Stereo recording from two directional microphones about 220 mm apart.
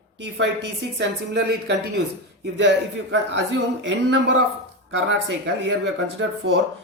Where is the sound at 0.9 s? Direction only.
50° right (ahead or behind).